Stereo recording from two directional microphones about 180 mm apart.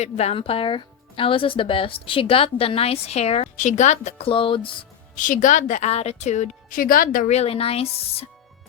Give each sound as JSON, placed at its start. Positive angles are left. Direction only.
{"t": 0.0, "sound": "speech", "side_deg": 35}
{"t": 5.1, "sound": "speech", "side_deg": 45}